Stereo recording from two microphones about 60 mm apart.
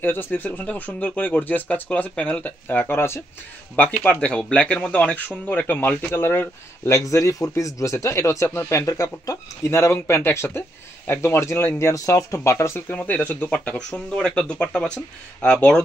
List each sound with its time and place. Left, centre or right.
0.0 s speech: left
2.7 s speech: left
3.7 s speech: left
7.0 s speech: left
9.6 s speech: left
11.9 s speech: left
12.8 s speech: left